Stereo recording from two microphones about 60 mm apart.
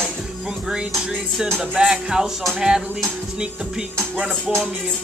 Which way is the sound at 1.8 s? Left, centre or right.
Centre.